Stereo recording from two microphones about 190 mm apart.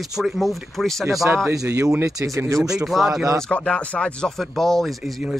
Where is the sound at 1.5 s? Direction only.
15° right (ahead or behind).